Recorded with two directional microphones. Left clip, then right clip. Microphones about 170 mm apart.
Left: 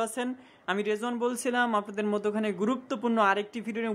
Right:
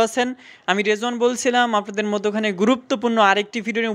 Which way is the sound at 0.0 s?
30° right (ahead or behind).